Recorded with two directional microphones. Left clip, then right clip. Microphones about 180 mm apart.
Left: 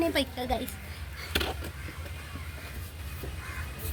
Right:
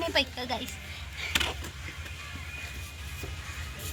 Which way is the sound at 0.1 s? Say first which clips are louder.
Right 1 dB; 20° right (ahead or behind).